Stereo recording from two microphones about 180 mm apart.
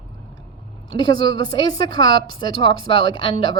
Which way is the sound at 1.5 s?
25° left (ahead or behind).